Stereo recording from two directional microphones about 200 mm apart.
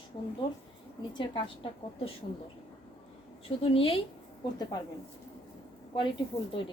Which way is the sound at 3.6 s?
25° left (ahead or behind).